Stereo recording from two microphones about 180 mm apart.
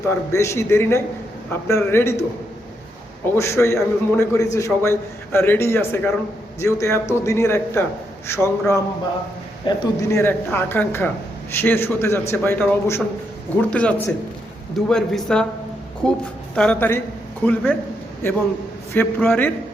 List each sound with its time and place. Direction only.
0.0 s a man's voice: 15° left (ahead or behind)
3.3 s a man's voice: 15° left (ahead or behind)